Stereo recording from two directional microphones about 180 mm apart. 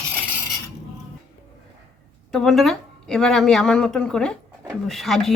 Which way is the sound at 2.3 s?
Centre (ahead or behind).